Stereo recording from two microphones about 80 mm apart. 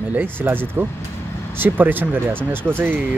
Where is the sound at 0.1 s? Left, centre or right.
Right.